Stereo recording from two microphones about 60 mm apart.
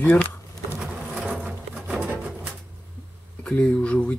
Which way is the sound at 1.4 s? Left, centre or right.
Centre.